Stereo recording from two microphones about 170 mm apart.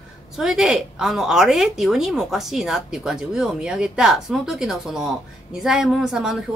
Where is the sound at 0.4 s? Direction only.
Centre (ahead or behind).